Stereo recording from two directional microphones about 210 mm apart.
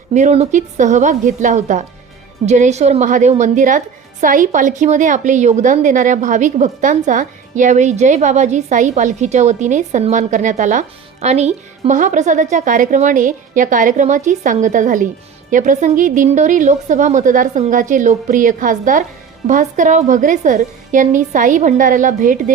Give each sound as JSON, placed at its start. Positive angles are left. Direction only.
{"t": 0.1, "sound": "a woman's voice", "side_deg": -35}